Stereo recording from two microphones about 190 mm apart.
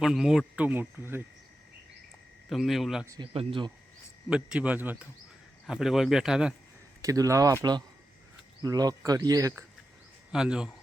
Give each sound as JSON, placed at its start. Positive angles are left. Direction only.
{"t": 0.0, "sound": "speech", "side_deg": 0}
{"t": 2.5, "sound": "speech", "side_deg": 0}
{"t": 3.1, "sound": "speech", "side_deg": -25}
{"t": 4.3, "sound": "speech", "side_deg": -5}
{"t": 7.0, "sound": "speech", "side_deg": -15}
{"t": 10.3, "sound": "speech", "side_deg": -5}